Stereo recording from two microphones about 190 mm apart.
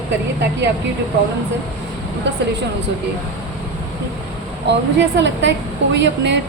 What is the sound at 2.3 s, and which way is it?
Speech, 65° right (ahead or behind).